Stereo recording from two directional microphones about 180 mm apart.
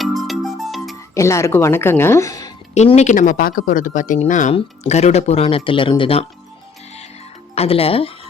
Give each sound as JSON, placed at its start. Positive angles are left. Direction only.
{"t": 0.0, "sound": "music", "side_deg": 0}
{"t": 1.1, "sound": "speech", "side_deg": 15}
{"t": 2.7, "sound": "speech", "side_deg": 40}
{"t": 7.5, "sound": "speech", "side_deg": 35}